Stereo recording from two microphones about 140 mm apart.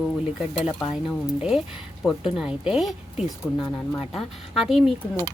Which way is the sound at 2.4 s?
5° right (ahead or behind).